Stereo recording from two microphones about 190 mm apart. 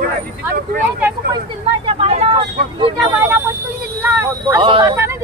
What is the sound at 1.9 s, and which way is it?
Speech, 30° right (ahead or behind).